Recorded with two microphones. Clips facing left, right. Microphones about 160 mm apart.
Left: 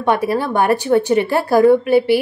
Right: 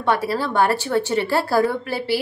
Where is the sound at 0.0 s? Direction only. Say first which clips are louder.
Left 4 dB; 15° left (ahead or behind).